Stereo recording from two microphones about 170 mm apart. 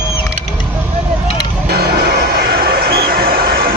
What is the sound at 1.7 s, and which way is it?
Music, 70° right (ahead or behind).